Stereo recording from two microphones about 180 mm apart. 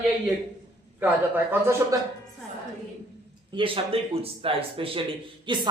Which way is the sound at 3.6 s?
30° right (ahead or behind).